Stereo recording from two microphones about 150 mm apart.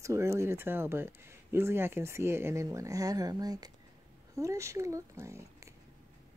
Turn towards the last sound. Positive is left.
turn(degrees=-20)  # may be behind; listen again after turning